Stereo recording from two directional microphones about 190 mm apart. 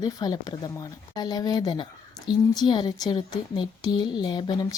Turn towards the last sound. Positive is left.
turn(degrees=20)  # may be behind; listen again after turning